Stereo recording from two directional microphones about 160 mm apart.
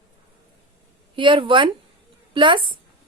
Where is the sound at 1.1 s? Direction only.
30° right (ahead or behind).